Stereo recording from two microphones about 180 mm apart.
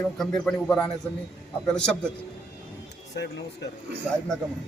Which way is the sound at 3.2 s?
70° left (ahead or behind).